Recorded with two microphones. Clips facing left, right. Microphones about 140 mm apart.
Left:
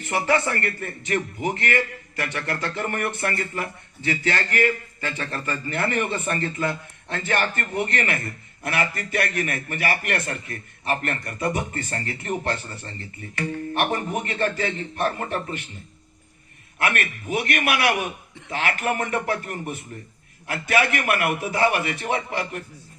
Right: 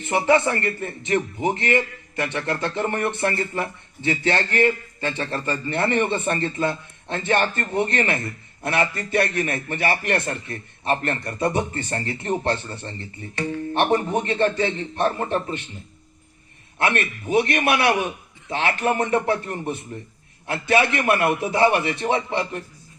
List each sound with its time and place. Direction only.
0.0 s a man's voice: 20° right (ahead or behind)
16.7 s a man's voice: 25° right (ahead or behind)